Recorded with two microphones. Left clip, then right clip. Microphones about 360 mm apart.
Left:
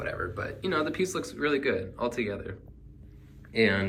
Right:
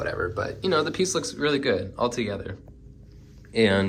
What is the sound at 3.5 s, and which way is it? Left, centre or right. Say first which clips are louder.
Speech: right 4 dB; centre.